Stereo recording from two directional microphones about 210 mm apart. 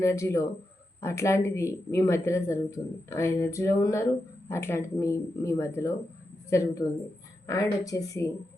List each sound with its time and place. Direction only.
0.0 s speech: 15° left (ahead or behind)